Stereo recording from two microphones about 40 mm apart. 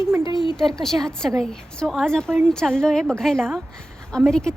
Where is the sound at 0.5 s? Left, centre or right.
Centre.